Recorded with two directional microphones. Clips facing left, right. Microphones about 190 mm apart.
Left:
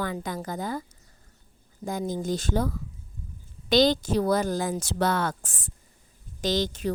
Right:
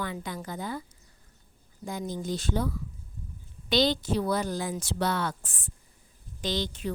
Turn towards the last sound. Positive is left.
turn(degrees=40)  # may be behind; listen again after turning